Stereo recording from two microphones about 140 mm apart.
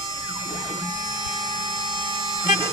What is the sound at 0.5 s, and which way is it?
Emergency vehicle, 30° right (ahead or behind).